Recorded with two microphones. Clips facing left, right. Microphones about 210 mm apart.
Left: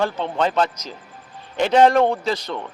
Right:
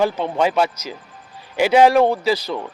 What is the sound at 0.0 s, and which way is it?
Speech, 10° right (ahead or behind).